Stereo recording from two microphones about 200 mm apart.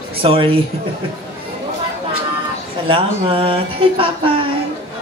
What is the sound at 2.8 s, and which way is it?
Speech, 25° right (ahead or behind).